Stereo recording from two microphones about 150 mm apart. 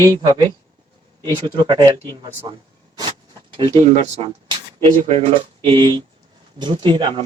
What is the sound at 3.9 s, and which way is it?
Speech, 50° right (ahead or behind).